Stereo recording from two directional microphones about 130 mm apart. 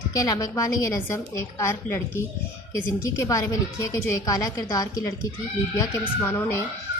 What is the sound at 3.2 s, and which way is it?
A woman's voice, 25° left (ahead or behind).